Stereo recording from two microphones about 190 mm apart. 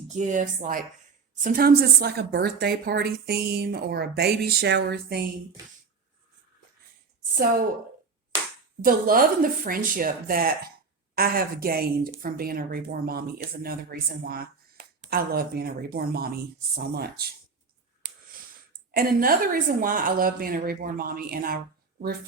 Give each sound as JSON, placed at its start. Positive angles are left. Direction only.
{"t": 0.1, "sound": "a woman's voice", "side_deg": -40}
{"t": 8.8, "sound": "a woman's voice", "side_deg": -50}
{"t": 14.3, "sound": "a sound", "side_deg": -50}
{"t": 15.1, "sound": "a woman's voice", "side_deg": -55}
{"t": 18.9, "sound": "a woman's voice", "side_deg": -50}